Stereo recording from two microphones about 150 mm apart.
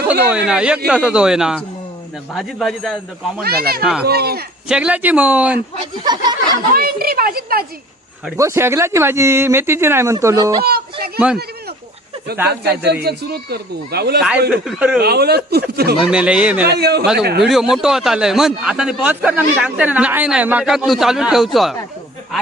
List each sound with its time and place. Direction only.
0.1 s speech: 10° right (ahead or behind)
3.4 s speech: 90° right
4.7 s speech: 5° right (ahead or behind)
6.0 s a sound: 30° right (ahead or behind)
6.7 s speech: 85° right
8.4 s speech: 20° right (ahead or behind)
10.6 s speech: 90° right
12.5 s speech: 90° right
14.5 s speech: 5° right (ahead or behind)
15.0 s speech: 90° right
16.0 s speech: 5° right (ahead or behind)
16.6 s speech: 90° right
17.4 s speech: centre (ahead or behind)